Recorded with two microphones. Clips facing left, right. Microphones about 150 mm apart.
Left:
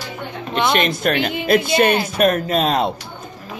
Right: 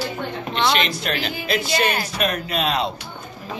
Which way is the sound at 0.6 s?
50° left (ahead or behind).